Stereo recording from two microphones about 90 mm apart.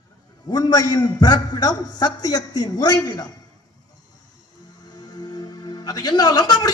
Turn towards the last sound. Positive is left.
turn(degrees=45)  # may be behind; listen again after turning